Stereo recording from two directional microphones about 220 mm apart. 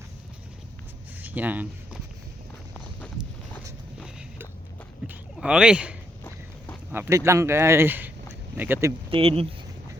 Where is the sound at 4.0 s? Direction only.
5° right (ahead or behind).